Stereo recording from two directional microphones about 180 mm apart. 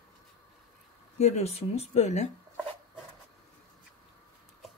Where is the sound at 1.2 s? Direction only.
35° left (ahead or behind).